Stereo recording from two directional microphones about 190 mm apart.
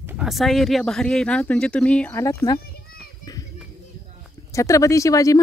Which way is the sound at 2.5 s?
50° left (ahead or behind).